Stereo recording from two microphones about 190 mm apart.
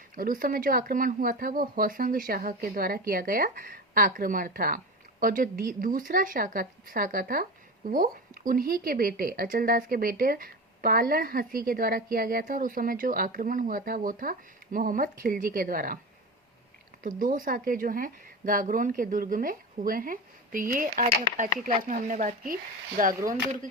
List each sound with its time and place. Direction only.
0.2 s speech: 50° right (ahead or behind)
17.0 s speech: 45° right (ahead or behind)